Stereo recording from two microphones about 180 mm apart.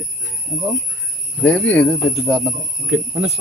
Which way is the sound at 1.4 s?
5° left (ahead or behind).